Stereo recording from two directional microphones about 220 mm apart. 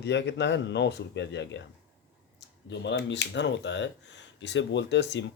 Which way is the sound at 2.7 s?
55° left (ahead or behind).